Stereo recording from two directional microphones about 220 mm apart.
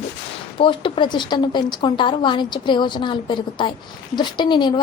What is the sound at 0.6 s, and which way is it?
A woman's voice, 25° left (ahead or behind).